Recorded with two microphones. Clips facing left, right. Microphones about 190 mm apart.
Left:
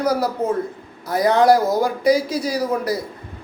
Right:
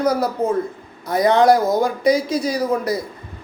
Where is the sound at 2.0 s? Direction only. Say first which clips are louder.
Even; 25° right (ahead or behind).